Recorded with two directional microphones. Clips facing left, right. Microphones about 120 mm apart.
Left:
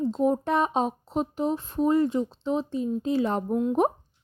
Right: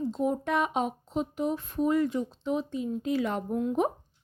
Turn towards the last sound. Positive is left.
turn(degrees=25)  # may be behind; listen again after turning